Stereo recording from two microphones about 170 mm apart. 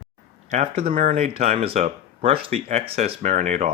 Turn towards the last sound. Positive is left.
turn(degrees=-40)  # may be behind; listen again after turning